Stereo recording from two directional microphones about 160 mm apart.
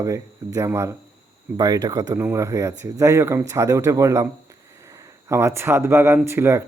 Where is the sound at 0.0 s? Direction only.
20° right (ahead or behind).